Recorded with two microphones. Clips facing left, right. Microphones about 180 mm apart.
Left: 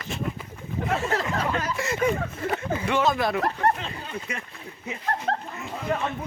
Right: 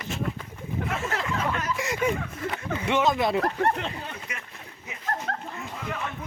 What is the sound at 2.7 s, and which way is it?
Speech, 20° right (ahead or behind).